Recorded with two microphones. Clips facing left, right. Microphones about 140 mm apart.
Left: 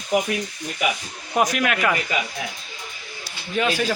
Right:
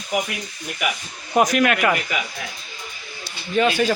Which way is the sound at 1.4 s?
Centre (ahead or behind).